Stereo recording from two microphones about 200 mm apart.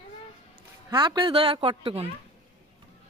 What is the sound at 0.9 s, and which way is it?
A woman's voice, 20° right (ahead or behind).